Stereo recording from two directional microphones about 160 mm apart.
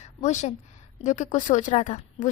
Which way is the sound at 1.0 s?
50° left (ahead or behind).